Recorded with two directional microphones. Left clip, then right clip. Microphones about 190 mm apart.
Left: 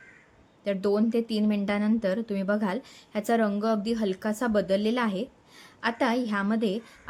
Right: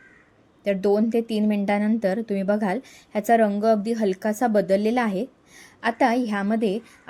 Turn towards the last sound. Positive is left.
turn(degrees=-20)  # may be behind; listen again after turning